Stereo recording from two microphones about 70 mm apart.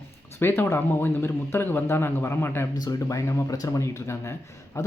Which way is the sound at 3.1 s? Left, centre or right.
Left.